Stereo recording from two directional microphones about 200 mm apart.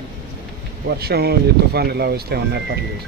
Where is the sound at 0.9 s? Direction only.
55° right (ahead or behind).